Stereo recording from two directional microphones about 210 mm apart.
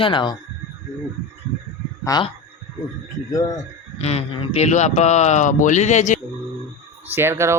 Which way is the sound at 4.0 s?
30° left (ahead or behind).